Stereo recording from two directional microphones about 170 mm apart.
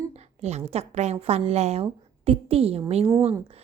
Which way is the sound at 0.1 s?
40° right (ahead or behind).